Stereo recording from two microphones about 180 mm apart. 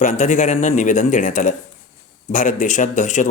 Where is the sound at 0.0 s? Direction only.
40° left (ahead or behind).